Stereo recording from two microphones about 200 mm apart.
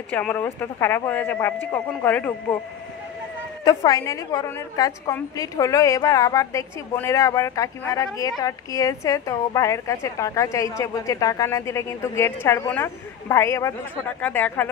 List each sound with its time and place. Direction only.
0.1 s a woman's voice: 10° left (ahead or behind)
3.6 s a woman's voice: 15° left (ahead or behind)